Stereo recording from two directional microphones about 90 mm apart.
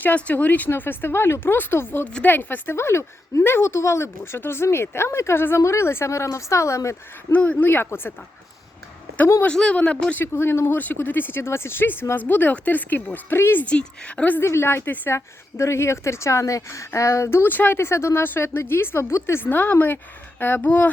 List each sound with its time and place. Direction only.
0.0 s a woman's voice: 20° left (ahead or behind); by 7.3 s 35° left (ahead or behind)
7.3 s a woman's voice: 15° left (ahead or behind)
9.4 s speech: 10° left (ahead or behind)
10.3 s a woman's voice: 25° left (ahead or behind)
13.7 s speech: 10° left (ahead or behind)
14.4 s a woman's voice: 30° left (ahead or behind)